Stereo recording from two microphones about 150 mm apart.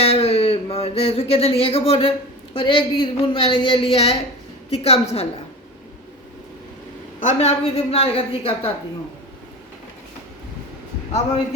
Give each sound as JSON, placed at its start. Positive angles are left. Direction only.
{"t": 0.0, "sound": "a woman's voice", "side_deg": 40}
{"t": 7.2, "sound": "a woman's voice", "side_deg": 50}